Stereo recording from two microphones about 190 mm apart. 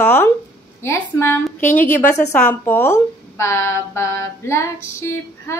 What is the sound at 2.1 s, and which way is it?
A woman's voice, 10° left (ahead or behind).